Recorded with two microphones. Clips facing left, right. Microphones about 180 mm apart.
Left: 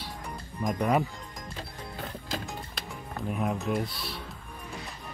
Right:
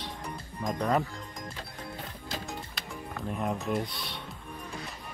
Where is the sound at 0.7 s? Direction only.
15° left (ahead or behind).